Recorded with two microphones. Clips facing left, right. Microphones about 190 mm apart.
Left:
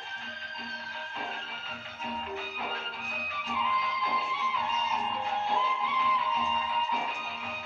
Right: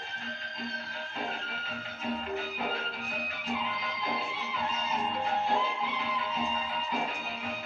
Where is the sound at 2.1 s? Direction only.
40° right (ahead or behind).